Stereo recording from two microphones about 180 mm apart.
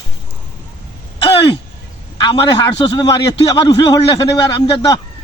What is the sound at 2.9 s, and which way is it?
A man's voice, 20° left (ahead or behind).